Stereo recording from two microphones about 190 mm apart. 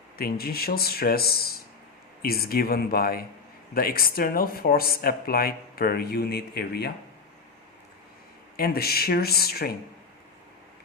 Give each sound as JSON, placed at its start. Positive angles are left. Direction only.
{"t": 0.2, "sound": "speech", "side_deg": 55}
{"t": 8.5, "sound": "speech", "side_deg": 55}